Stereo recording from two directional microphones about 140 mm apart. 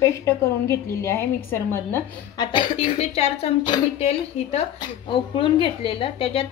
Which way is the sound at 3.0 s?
50° left (ahead or behind).